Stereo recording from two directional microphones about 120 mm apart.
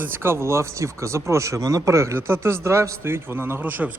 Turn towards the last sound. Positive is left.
turn(degrees=-15)  # may be behind; listen again after turning